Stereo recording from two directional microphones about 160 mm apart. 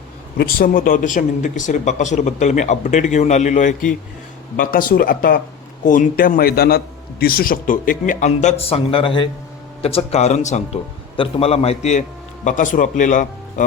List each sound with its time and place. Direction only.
0.3 s a man's voice: 65° left (ahead or behind)